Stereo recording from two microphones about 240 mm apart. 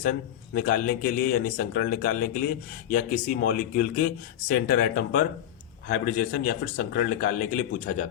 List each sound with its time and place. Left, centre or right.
0.0 s a man's voice: left